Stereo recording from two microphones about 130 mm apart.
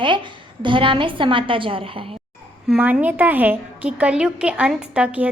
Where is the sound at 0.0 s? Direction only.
40° right (ahead or behind).